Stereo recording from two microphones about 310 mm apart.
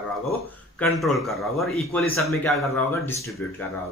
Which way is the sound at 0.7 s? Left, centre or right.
Centre.